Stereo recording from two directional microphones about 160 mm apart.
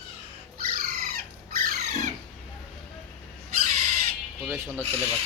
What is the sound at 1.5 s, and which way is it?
Squawk, 60° right (ahead or behind).